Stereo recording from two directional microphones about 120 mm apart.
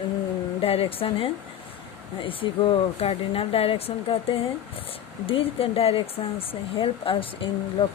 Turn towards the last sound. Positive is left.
turn(degrees=45)  # may be behind; listen again after turning